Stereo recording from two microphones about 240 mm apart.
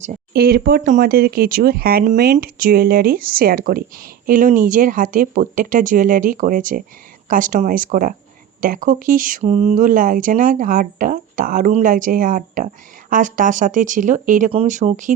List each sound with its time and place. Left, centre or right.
0.0 s speech: right